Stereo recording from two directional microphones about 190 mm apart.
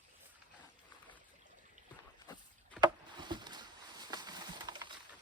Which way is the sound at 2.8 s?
25° right (ahead or behind).